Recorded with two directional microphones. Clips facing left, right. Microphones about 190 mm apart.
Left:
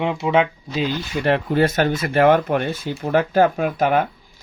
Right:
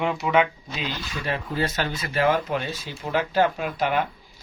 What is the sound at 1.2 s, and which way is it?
Speech, 60° left (ahead or behind).